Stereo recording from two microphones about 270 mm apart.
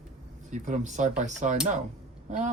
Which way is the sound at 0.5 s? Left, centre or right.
Right.